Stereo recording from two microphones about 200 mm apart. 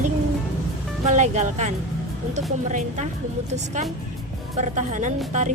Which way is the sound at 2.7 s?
35° right (ahead or behind).